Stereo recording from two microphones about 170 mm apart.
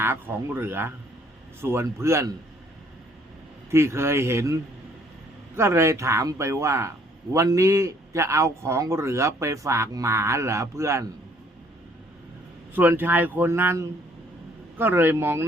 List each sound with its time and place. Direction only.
0.0 s a man's voice: 15° right (ahead or behind)
3.7 s a man's voice: 15° right (ahead or behind)
12.7 s a man's voice: 10° right (ahead or behind)